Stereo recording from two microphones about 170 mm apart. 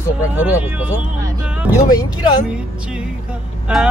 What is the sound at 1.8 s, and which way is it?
Speech, 25° left (ahead or behind).